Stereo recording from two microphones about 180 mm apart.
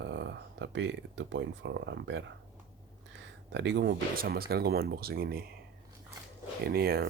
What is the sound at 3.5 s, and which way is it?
Speech, 75° right (ahead or behind).